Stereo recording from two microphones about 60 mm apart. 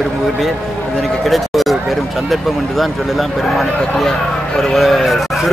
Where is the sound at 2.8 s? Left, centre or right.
Centre.